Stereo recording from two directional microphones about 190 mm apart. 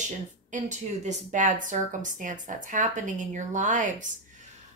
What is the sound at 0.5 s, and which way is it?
Speech, 40° right (ahead or behind).